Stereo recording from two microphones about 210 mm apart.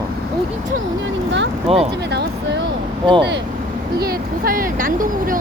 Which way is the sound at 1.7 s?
30° right (ahead or behind).